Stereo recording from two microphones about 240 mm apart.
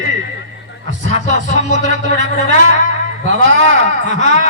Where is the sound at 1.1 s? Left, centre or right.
Right.